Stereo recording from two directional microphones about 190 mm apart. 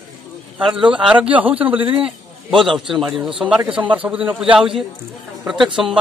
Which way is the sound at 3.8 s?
25° right (ahead or behind).